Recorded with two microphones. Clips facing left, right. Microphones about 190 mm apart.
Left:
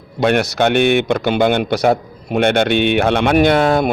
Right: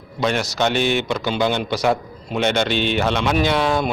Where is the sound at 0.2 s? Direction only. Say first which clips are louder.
Left 6 dB; 60° left (ahead or behind).